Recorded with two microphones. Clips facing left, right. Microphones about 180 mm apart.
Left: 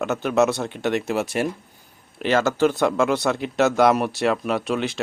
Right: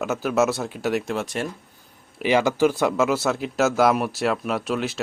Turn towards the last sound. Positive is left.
turn(degrees=0)  # may be behind; listen again after turning